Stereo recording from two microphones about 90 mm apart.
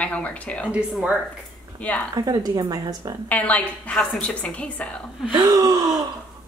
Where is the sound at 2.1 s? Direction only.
45° right (ahead or behind).